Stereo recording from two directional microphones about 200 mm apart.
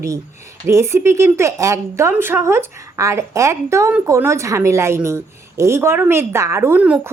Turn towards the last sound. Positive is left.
turn(degrees=-5)  # may be behind; listen again after turning